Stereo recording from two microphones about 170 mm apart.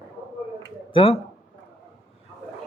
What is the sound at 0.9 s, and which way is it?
Speech, 35° left (ahead or behind).